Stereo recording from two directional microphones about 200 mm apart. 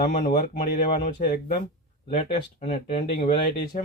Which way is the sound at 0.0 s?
45° left (ahead or behind).